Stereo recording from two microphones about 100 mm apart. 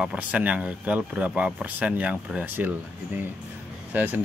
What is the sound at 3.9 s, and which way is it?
Speech, 15° right (ahead or behind).